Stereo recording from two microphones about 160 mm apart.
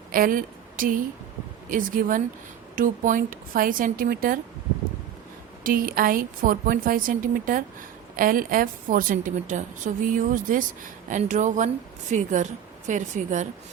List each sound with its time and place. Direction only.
0.1 s a woman's voice: 60° right (ahead or behind)
5.6 s a woman's voice: 60° right (ahead or behind)